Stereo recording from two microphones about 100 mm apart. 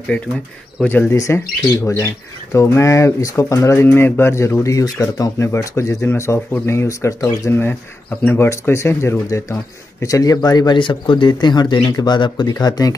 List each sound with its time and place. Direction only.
0.8 s speech: 10° left (ahead or behind)
1.1 s speech: 30° left (ahead or behind)